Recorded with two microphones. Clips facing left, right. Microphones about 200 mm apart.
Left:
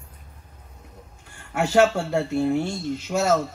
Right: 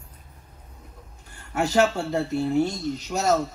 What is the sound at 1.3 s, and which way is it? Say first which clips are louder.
Speech: left 2 dB; 40° right (ahead or behind).